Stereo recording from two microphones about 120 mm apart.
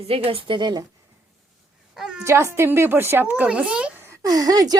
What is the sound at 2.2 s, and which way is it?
Speech, 25° right (ahead or behind).